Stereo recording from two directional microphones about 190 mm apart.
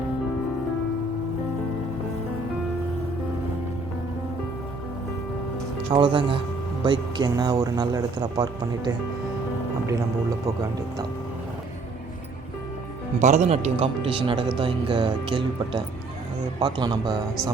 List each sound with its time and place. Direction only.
5.9 s speech: 25° right (ahead or behind)
10.4 s speech: 20° right (ahead or behind)
13.2 s speech: 35° right (ahead or behind); by 17.5 s 20° right (ahead or behind)